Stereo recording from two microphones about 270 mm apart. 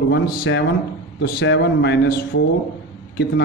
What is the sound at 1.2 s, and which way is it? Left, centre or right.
A man's voice, left.